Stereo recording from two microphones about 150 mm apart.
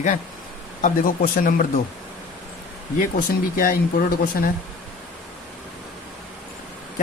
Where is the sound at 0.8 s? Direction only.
65° left (ahead or behind).